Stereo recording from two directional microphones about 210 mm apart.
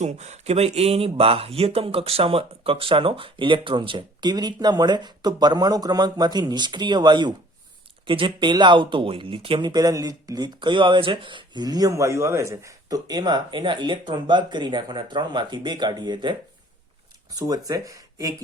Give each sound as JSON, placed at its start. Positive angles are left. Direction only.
{"t": 0.0, "sound": "speech", "side_deg": -30}
{"t": 17.3, "sound": "speech", "side_deg": -15}